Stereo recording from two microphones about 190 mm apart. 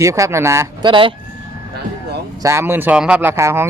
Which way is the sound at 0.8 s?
25° right (ahead or behind).